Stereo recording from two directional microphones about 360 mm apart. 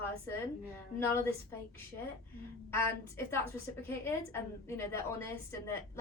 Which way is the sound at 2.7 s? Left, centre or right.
Centre.